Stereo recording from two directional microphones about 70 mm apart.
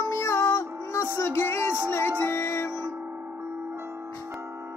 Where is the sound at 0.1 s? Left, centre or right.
Left.